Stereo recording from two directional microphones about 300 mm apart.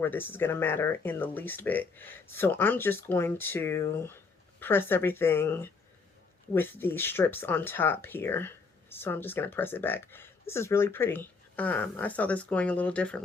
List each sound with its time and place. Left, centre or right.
0.0 s speech: centre